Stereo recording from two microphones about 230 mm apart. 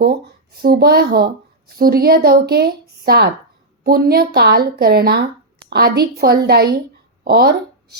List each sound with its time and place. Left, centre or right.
0.6 s a woman's voice: right